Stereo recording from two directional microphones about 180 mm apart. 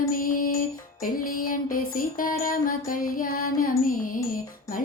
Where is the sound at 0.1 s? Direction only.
50° left (ahead or behind).